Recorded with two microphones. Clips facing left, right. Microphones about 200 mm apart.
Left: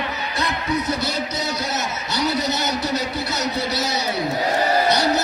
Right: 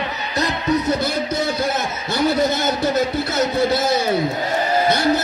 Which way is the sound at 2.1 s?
50° right (ahead or behind).